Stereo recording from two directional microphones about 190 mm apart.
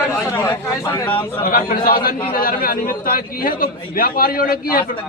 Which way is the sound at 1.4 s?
50° left (ahead or behind).